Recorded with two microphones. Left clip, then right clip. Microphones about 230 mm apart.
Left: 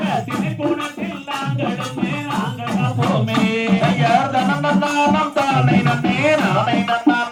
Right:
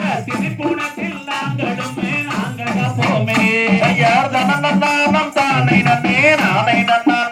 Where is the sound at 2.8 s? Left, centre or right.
Right.